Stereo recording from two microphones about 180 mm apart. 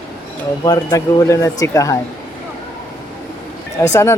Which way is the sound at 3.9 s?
15° left (ahead or behind).